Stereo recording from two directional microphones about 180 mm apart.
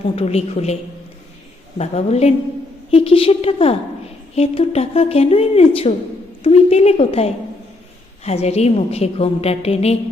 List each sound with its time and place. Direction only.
0.2 s a woman's voice: 35° left (ahead or behind)
1.8 s a woman's voice: 35° left (ahead or behind)